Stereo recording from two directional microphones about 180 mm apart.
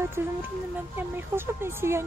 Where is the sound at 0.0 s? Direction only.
15° right (ahead or behind).